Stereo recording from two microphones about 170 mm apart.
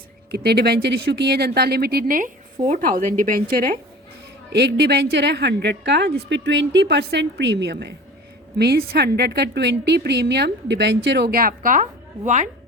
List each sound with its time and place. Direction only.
0.3 s a woman's voice: 70° right (ahead or behind)
4.5 s a woman's voice: 75° right (ahead or behind)
8.5 s a woman's voice: 70° right (ahead or behind); by 12.5 s 45° right (ahead or behind)